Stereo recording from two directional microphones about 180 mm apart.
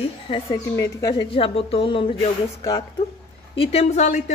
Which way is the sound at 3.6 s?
35° left (ahead or behind).